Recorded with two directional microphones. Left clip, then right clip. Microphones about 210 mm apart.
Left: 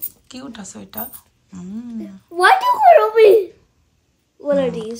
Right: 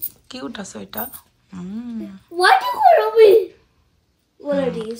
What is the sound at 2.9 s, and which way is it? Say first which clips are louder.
Speech: right 1 dB; 35° left (ahead or behind).